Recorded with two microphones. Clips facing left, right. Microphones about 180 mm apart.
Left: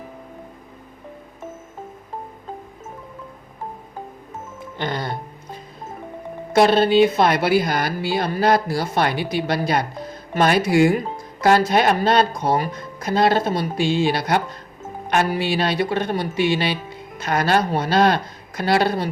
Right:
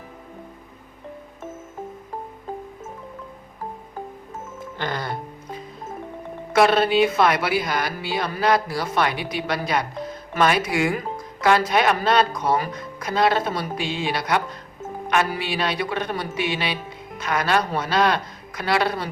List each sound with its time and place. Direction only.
4.8 s speech: 20° left (ahead or behind)
6.6 s speech: 30° left (ahead or behind)